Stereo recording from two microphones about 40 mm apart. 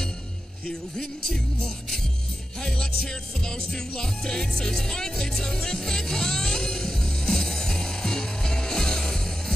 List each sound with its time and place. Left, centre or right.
0.7 s speech: centre
2.6 s music: centre